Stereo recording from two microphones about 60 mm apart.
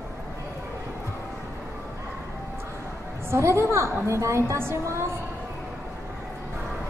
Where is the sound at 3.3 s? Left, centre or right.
Right.